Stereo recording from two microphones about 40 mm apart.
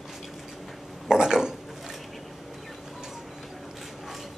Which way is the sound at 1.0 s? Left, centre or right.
Centre.